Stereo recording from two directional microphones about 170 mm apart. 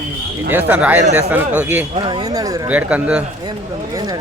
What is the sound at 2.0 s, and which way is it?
Speech, 30° right (ahead or behind).